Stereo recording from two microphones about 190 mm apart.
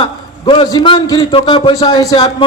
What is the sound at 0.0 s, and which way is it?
A man's voice, 25° left (ahead or behind).